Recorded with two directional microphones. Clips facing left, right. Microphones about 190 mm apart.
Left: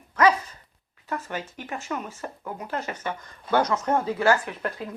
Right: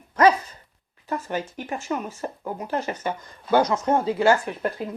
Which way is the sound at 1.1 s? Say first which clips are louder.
Right 4 dB; 35° right (ahead or behind).